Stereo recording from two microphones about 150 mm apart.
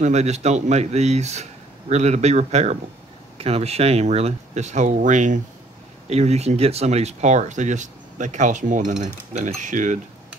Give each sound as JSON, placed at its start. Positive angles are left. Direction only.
{"t": 0.0, "sound": "speech", "side_deg": -45}
{"t": 6.0, "sound": "speech", "side_deg": -45}